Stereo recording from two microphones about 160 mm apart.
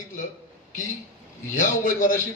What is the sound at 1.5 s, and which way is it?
Speech, 55° left (ahead or behind).